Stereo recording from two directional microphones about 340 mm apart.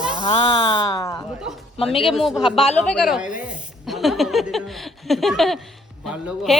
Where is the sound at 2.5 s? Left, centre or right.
Centre.